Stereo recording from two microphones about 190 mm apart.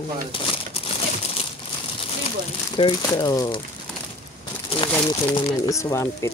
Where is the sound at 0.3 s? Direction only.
30° left (ahead or behind).